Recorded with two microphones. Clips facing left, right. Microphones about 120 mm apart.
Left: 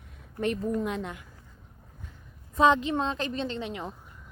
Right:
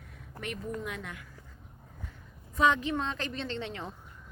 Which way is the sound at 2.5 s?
25° left (ahead or behind).